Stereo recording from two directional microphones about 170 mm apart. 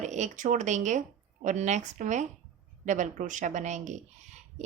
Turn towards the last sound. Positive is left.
turn(degrees=-45)  # may be behind; listen again after turning